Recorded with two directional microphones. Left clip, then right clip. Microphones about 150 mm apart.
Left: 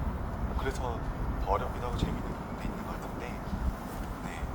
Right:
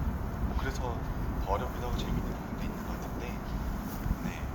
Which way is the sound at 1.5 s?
15° left (ahead or behind).